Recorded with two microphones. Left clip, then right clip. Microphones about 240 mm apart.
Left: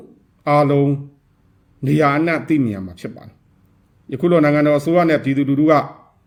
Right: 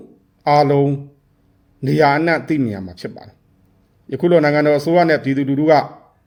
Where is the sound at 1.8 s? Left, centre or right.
Right.